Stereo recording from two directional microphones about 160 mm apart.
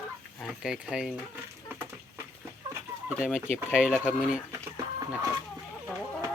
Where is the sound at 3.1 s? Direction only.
10° right (ahead or behind).